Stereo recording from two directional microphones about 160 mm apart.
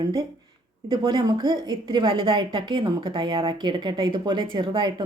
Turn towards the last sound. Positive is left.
turn(degrees=-30)  # may be behind; listen again after turning